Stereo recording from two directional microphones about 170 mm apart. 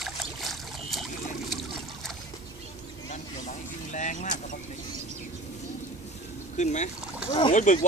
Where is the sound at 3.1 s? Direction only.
45° left (ahead or behind).